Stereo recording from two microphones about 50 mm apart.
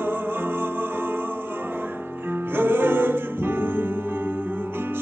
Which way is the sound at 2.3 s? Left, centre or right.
Right.